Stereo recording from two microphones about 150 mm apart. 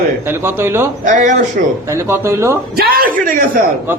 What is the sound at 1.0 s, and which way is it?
Speech, 60° right (ahead or behind).